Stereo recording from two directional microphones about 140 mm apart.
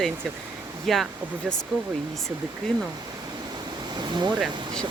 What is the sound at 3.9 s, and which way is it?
Speech, 30° right (ahead or behind).